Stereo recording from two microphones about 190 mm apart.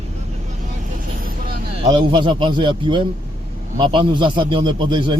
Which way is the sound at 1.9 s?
25° right (ahead or behind).